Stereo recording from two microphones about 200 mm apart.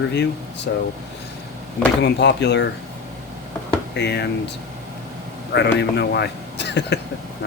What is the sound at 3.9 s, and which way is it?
Speech, 55° left (ahead or behind).